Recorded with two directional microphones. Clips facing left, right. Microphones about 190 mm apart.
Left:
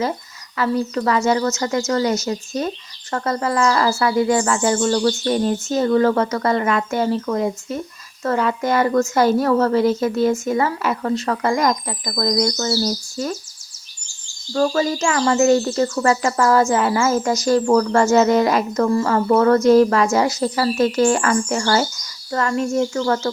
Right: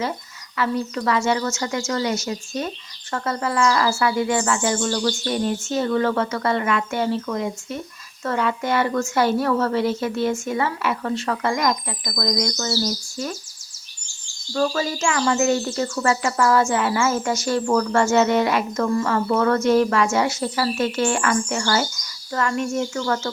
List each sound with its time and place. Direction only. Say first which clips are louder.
0.5 s speech: left 3 dB; 40° left (ahead or behind)
14.5 s speech: left 4 dB; 35° left (ahead or behind)